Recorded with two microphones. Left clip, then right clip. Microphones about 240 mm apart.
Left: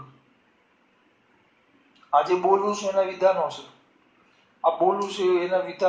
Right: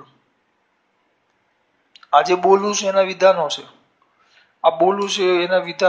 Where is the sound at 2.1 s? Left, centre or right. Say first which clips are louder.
Right 6 dB; right.